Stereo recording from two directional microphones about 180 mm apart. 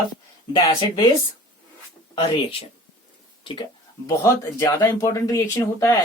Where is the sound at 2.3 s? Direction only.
30° left (ahead or behind).